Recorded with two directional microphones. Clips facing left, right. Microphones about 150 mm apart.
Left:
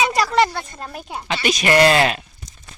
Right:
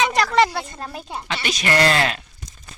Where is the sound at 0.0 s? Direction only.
5° left (ahead or behind).